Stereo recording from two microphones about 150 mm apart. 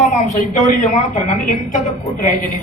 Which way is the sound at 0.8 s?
55° left (ahead or behind).